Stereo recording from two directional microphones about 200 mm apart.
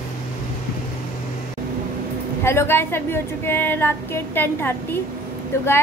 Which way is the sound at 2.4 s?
10° left (ahead or behind).